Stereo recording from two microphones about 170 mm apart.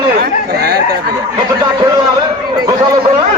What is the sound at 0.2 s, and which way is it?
Chatter, 65° right (ahead or behind).